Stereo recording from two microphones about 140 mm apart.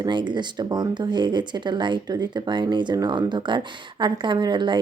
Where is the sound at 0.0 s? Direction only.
35° right (ahead or behind).